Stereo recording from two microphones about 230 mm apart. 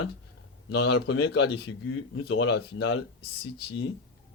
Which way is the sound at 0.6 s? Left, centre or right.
Left.